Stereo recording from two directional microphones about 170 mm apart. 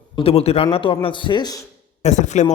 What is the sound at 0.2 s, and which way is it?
Speech, 35° left (ahead or behind).